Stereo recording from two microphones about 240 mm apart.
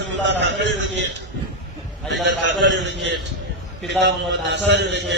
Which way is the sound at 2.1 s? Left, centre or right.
Right.